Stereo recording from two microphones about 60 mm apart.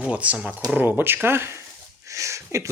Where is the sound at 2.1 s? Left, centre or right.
Right.